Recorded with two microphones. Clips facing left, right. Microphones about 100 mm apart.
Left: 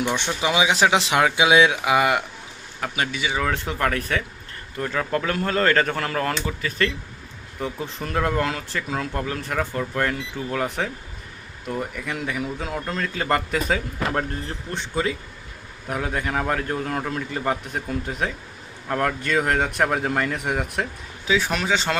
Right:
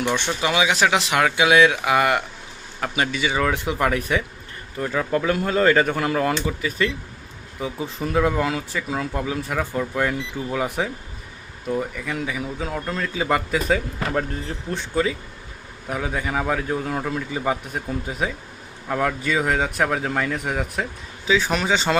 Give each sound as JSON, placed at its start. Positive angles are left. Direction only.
{"t": 0.4, "sound": "speech", "side_deg": 20}
{"t": 2.8, "sound": "speech", "side_deg": 0}
{"t": 3.5, "sound": "speech", "side_deg": -10}